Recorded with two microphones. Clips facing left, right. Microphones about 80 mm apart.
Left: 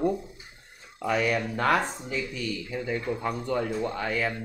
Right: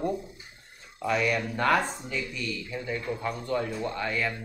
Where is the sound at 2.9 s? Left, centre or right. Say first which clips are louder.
Left 2 dB; centre.